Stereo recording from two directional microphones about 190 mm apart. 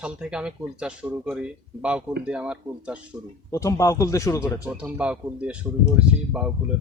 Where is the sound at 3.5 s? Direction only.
15° left (ahead or behind).